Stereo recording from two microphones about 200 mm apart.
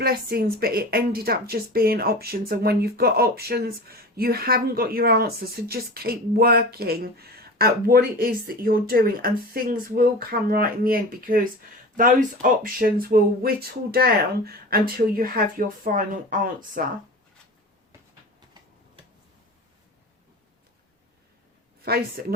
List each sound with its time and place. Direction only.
0.0 s a woman's voice: 50° right (ahead or behind)
21.8 s a woman's voice: 50° right (ahead or behind)